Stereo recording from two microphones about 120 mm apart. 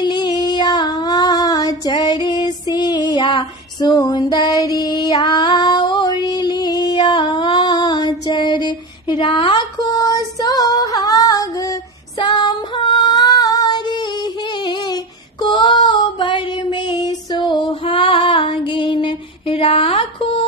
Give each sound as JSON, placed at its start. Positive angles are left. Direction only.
{"t": 0.0, "sound": "child singing", "side_deg": 40}
{"t": 2.2, "sound": "female singing", "side_deg": 35}
{"t": 12.2, "sound": "female singing", "side_deg": 40}
{"t": 15.4, "sound": "child singing", "side_deg": 40}